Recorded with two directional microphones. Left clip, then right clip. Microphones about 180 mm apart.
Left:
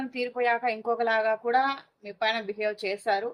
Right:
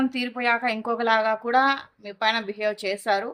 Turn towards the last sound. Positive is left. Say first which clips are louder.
# right 3 dB
turn(degrees=-40)  # may be behind; listen again after turning